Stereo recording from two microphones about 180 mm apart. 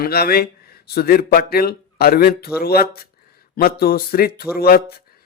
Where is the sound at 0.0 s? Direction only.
60° left (ahead or behind).